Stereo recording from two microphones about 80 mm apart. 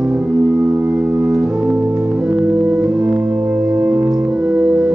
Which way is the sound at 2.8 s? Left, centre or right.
Centre.